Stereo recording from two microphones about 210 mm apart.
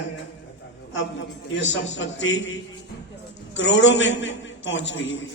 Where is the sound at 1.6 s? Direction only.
60° left (ahead or behind).